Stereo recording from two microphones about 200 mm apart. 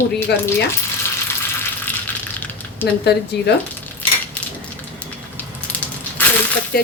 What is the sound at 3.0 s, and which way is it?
Speech, 55° left (ahead or behind).